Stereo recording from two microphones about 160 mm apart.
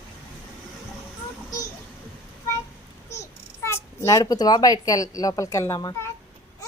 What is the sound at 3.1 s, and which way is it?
A child's voice, 15° left (ahead or behind).